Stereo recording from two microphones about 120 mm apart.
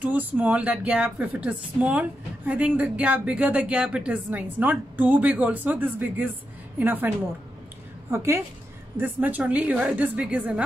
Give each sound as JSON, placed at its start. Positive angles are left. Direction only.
{"t": 0.0, "sound": "speech", "side_deg": -15}
{"t": 8.9, "sound": "speech", "side_deg": -15}